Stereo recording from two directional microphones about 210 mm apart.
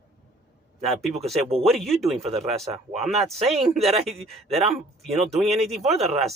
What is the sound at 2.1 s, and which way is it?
Speech, 30° right (ahead or behind).